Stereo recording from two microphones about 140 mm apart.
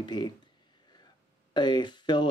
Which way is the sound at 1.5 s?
30° left (ahead or behind).